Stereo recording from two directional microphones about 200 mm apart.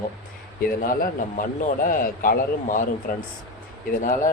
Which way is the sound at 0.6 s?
45° left (ahead or behind).